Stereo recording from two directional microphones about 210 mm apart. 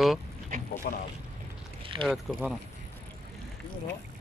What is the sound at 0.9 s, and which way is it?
Speech, 45° left (ahead or behind).